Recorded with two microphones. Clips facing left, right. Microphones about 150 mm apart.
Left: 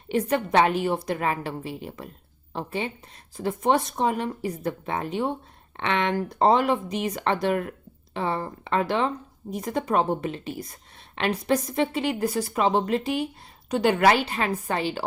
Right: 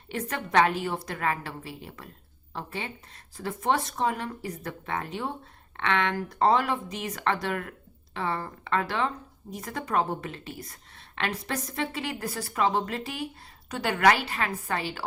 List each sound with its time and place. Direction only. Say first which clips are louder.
0.1 s speech: left 5 dB; 20° left (ahead or behind)